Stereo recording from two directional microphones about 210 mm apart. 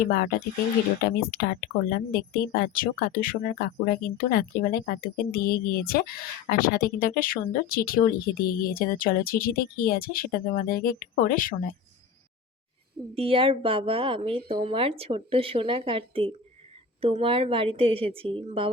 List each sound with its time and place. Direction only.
0.0 s speech: 45° left (ahead or behind)
1.9 s speech: 45° left (ahead or behind)
13.1 s speech: 25° right (ahead or behind)